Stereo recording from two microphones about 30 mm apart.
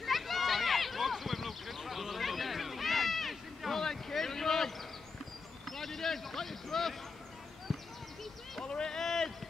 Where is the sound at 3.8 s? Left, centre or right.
Centre.